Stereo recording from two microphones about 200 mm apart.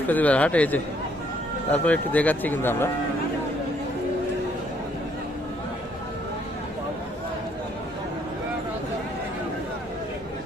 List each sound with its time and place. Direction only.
0.1 s speech: 5° left (ahead or behind)